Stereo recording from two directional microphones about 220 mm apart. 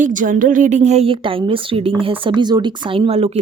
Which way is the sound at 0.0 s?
35° right (ahead or behind).